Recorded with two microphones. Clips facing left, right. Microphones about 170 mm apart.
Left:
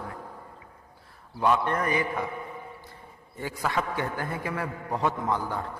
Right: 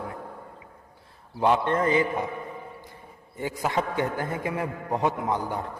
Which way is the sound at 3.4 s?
20° right (ahead or behind).